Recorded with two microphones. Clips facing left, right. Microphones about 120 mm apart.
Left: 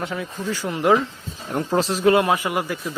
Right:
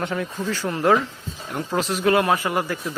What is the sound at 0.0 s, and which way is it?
Speech, 5° left (ahead or behind).